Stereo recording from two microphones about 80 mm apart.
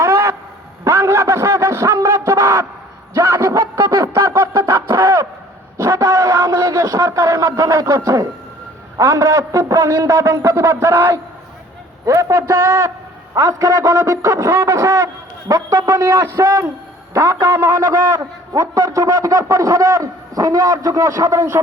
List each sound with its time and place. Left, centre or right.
0.0 s a sound: right
5.8 s a man's voice: right
9.0 s a man's voice: right